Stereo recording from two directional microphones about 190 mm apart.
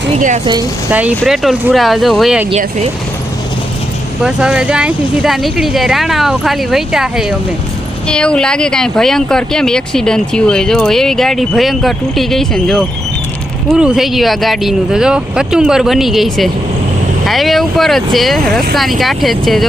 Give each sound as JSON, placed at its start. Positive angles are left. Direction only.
{"t": 0.9, "sound": "speech", "side_deg": -10}
{"t": 2.5, "sound": "speech", "side_deg": -35}
{"t": 4.2, "sound": "speech", "side_deg": -5}